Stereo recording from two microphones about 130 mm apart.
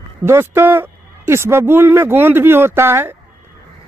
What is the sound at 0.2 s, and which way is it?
Speech, 20° right (ahead or behind).